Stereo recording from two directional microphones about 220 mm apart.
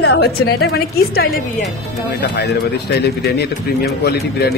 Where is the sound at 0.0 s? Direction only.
45° left (ahead or behind).